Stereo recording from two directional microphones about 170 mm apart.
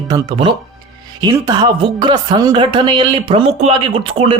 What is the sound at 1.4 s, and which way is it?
Speech, 25° right (ahead or behind).